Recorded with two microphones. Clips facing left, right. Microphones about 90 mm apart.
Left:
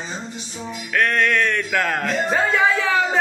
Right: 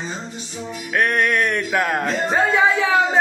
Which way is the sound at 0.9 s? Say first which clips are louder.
Even; 20° right (ahead or behind).